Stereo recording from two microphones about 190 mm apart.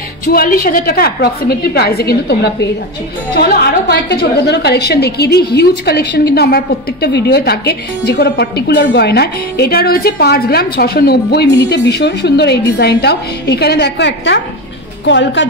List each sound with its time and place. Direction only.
0.3 s a woman's voice: 50° left (ahead or behind); by 15.4 s 70° left (ahead or behind)